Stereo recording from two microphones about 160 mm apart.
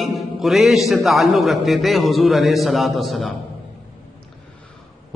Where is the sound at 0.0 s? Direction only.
Centre (ahead or behind).